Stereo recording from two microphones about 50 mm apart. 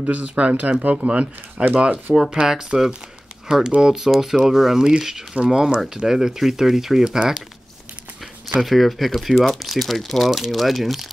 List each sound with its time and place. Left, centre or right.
0.0 s speech: right
2.1 s speech: centre
8.5 s speech: centre